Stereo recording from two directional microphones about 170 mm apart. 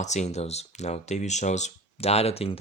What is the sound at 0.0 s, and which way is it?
Speech, 40° left (ahead or behind).